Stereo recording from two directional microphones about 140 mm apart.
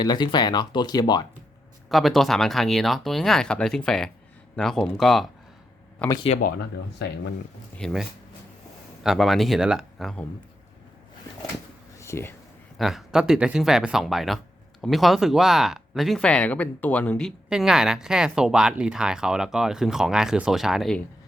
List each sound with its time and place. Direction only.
0.0 s speech: 30° left (ahead or behind)
1.9 s speech: centre (ahead or behind)
7.8 s speech: 5° left (ahead or behind)
9.0 s speech: centre (ahead or behind)
11.9 s a sound: 20° left (ahead or behind)
12.7 s speech: centre (ahead or behind)